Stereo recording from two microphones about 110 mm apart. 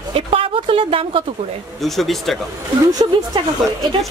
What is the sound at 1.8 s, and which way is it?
Speech, centre (ahead or behind).